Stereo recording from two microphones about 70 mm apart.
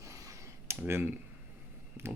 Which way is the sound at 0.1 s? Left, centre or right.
Right.